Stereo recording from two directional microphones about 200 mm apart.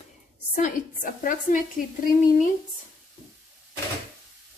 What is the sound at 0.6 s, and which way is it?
Speech, 40° left (ahead or behind).